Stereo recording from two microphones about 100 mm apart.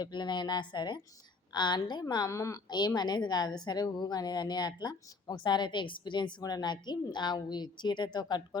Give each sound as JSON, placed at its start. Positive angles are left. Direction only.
{"t": 0.0, "sound": "a woman's voice", "side_deg": 45}
{"t": 2.6, "sound": "a woman's voice", "side_deg": 45}